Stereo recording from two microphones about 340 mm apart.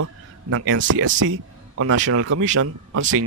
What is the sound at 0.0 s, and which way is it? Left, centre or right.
A man's voice, right.